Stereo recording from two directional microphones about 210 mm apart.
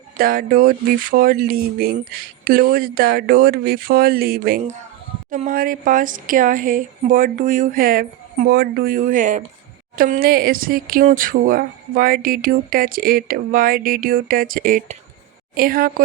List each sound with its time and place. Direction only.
0.2 s speech: 45° right (ahead or behind)